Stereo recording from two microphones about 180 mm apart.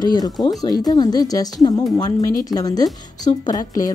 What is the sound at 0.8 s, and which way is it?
Speech, 20° left (ahead or behind).